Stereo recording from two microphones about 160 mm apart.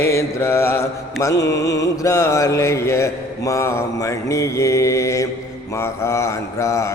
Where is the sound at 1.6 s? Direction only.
90° left.